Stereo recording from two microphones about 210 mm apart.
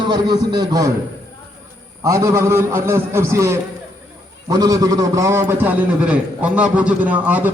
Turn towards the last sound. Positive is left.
turn(degrees=-5)  # may be behind; listen again after turning